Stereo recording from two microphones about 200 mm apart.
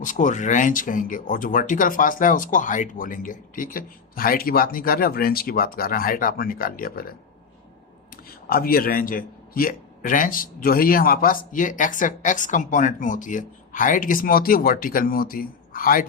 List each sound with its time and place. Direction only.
0.0 s speech: 40° left (ahead or behind)
8.1 s speech: 45° left (ahead or behind)